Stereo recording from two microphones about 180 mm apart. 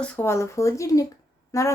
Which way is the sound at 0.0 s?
15° left (ahead or behind).